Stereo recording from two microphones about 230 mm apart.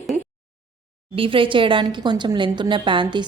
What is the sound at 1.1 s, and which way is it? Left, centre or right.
Speech, right.